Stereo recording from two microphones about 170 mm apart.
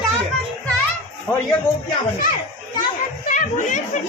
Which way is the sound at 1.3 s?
20° left (ahead or behind).